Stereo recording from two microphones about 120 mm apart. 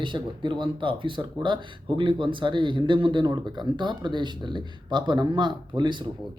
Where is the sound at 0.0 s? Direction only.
40° right (ahead or behind).